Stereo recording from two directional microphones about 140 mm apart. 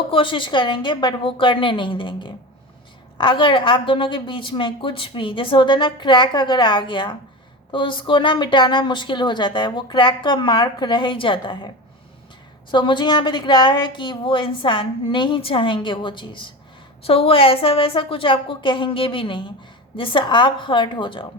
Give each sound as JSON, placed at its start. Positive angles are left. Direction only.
{"t": 0.1, "sound": "a woman's voice", "side_deg": 35}
{"t": 12.7, "sound": "a woman's voice", "side_deg": 35}